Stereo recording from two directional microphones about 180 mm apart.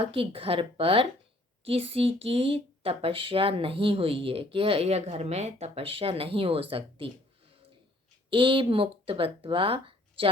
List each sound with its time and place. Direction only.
0.0 s speech: 30° right (ahead or behind)
8.3 s speech: 30° right (ahead or behind)